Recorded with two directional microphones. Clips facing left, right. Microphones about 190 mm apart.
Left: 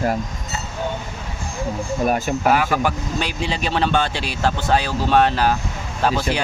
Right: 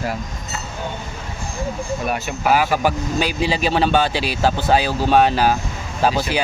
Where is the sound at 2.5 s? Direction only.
5° right (ahead or behind).